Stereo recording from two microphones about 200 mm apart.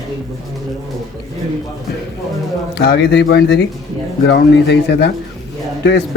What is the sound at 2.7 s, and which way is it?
Speech, 60° left (ahead or behind).